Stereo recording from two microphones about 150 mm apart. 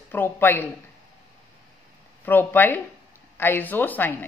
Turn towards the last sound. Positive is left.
turn(degrees=15)  # may be behind; listen again after turning